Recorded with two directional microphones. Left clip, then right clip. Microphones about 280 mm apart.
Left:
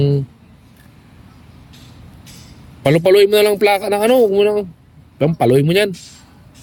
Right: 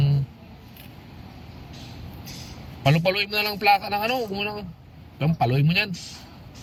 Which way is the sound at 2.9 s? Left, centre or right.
Left.